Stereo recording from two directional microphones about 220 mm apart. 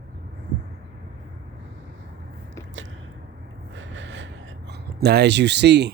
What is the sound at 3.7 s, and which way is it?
Gasp, 55° right (ahead or behind).